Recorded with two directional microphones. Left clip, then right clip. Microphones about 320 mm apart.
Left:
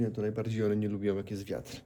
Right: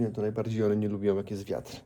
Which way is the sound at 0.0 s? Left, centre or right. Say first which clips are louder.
Right 3 dB; centre.